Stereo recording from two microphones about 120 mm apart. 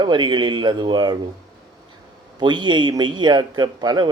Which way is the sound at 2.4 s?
40° right (ahead or behind).